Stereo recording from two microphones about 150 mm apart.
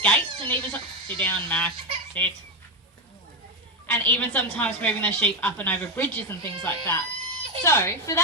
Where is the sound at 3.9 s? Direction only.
10° left (ahead or behind).